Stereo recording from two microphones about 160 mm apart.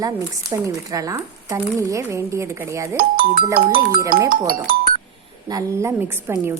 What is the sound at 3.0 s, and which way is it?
Speech, 65° right (ahead or behind).